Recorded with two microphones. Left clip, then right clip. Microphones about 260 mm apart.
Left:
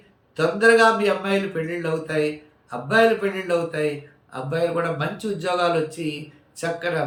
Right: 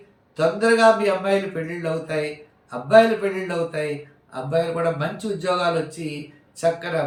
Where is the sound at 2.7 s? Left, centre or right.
Centre.